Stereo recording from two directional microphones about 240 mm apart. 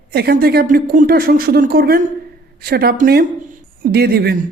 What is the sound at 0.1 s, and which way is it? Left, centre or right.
A woman's voice, right.